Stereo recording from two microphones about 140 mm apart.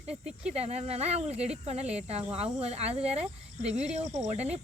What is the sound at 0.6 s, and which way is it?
Speech, 50° right (ahead or behind).